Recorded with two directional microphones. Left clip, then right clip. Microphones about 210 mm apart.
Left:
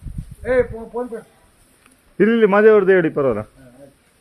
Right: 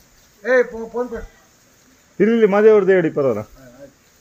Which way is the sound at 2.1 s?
15° left (ahead or behind).